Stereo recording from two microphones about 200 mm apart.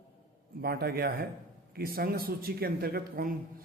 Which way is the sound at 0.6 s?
50° right (ahead or behind).